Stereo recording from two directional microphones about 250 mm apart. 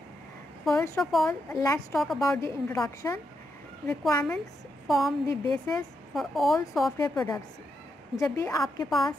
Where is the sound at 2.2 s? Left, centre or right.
Centre.